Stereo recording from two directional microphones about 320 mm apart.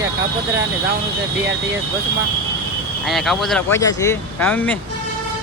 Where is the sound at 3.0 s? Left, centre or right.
Centre.